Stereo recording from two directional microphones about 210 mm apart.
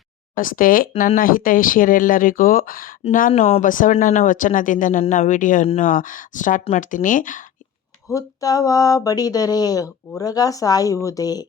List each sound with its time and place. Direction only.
0.3 s speech: 40° left (ahead or behind)
8.1 s speech: 15° left (ahead or behind)